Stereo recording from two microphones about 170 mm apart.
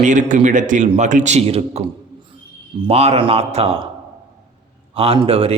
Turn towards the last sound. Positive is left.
turn(degrees=-35)  # may be behind; listen again after turning